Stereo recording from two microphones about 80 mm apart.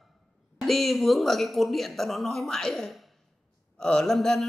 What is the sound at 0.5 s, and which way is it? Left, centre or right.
A man's voice, centre.